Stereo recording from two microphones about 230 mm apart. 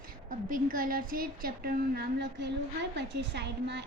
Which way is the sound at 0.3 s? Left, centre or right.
Right.